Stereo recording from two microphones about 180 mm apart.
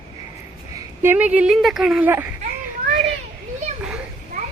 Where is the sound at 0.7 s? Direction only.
15° right (ahead or behind).